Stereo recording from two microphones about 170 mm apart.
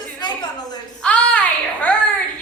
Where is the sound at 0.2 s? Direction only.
25° left (ahead or behind).